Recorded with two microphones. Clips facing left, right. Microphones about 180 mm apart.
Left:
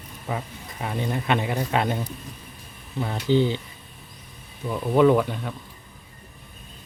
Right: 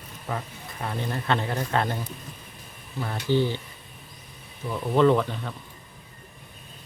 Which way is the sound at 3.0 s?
20° left (ahead or behind).